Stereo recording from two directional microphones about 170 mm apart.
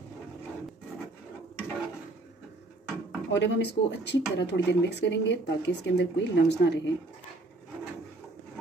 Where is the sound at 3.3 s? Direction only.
85° left.